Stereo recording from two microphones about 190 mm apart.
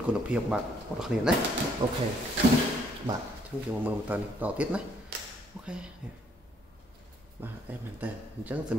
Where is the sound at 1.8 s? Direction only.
25° right (ahead or behind).